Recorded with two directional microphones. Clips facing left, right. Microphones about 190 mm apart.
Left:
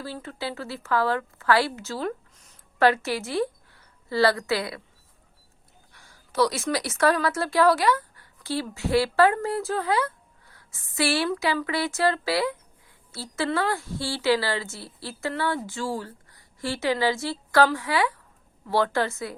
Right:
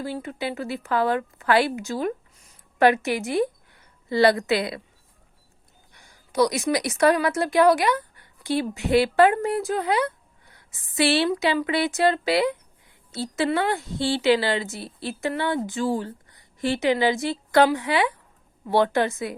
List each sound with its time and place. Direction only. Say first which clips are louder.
0.0 s a woman's voice: right 4 dB; 15° right (ahead or behind)
5.9 s a woman's voice: right 4 dB; 15° right (ahead or behind)